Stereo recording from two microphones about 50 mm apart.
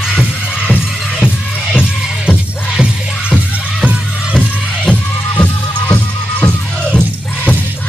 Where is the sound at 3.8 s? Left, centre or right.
Right.